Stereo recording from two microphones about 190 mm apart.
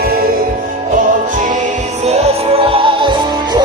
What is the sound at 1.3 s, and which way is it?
Music, 45° right (ahead or behind).